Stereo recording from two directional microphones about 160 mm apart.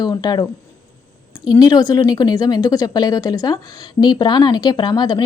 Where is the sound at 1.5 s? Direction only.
25° left (ahead or behind).